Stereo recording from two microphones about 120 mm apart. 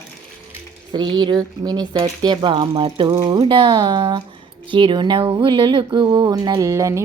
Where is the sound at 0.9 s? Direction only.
40° right (ahead or behind).